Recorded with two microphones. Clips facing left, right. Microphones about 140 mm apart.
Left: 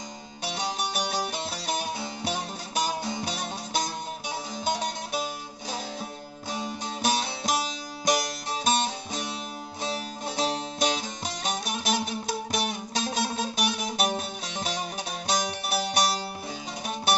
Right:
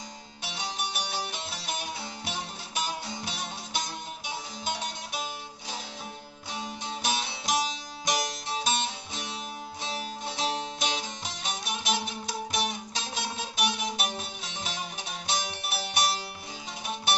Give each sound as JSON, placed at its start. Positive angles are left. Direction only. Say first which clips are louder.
{"t": 0.4, "sound": "music", "louder": "left 5 dB", "side_deg": 40}
{"t": 7.0, "sound": "music", "louder": "left 5 dB", "side_deg": 40}